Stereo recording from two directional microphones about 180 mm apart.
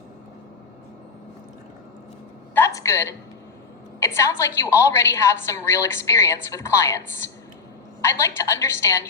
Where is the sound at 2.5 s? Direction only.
15° left (ahead or behind).